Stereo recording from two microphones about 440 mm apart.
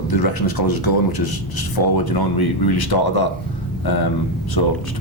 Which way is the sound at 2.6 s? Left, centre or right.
Left.